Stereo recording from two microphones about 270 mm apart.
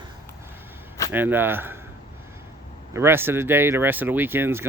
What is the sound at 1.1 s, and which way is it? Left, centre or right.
Speech, centre.